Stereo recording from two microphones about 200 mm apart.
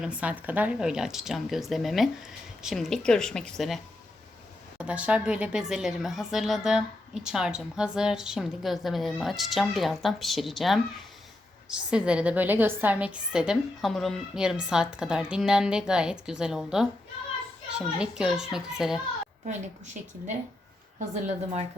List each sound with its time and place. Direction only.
0.0 s speech: 5° right (ahead or behind)
4.8 s speech: 5° right (ahead or behind)
19.5 s a woman's voice: 35° right (ahead or behind)